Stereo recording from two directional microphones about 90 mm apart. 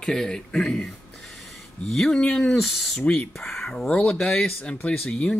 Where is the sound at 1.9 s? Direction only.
5° left (ahead or behind).